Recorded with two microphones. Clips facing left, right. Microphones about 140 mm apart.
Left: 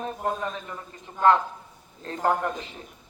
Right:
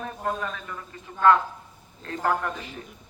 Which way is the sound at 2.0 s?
25° left (ahead or behind).